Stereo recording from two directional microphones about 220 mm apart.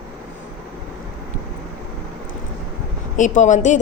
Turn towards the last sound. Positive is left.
turn(degrees=35)  # may be behind; listen again after turning